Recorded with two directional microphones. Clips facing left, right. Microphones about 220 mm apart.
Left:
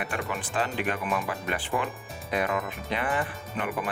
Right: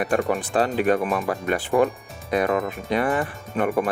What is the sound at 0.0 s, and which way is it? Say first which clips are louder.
Speech: right 10 dB; 40° right (ahead or behind).